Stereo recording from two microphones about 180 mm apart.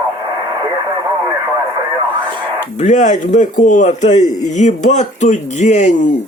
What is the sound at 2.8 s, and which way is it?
Speech, 45° left (ahead or behind).